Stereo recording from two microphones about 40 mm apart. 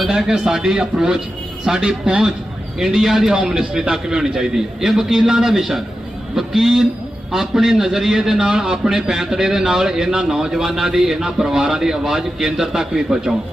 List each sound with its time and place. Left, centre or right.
0.1 s a man's voice: centre